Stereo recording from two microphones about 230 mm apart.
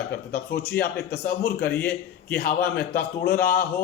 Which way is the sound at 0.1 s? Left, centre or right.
Left.